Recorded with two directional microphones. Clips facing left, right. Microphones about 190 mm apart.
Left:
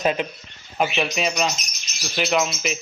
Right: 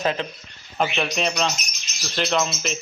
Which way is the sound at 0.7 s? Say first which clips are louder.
Left 1 dB; 5° left (ahead or behind).